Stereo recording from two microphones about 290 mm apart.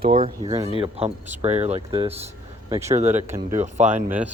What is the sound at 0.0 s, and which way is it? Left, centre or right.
A man's voice, centre.